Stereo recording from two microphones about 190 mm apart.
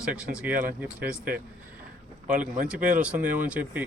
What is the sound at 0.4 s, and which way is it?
Speech, 10° right (ahead or behind).